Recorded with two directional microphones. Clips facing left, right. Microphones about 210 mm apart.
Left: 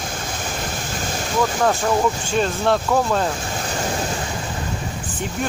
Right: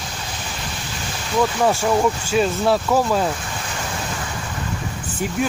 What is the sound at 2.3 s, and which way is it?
Speech, 5° right (ahead or behind).